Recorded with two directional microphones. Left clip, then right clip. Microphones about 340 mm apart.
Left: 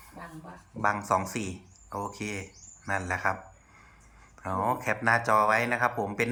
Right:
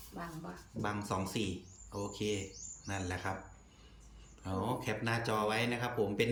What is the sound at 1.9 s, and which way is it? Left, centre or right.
Speech, left.